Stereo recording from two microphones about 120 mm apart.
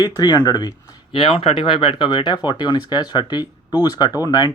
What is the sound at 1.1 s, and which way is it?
Speech, 50° left (ahead or behind).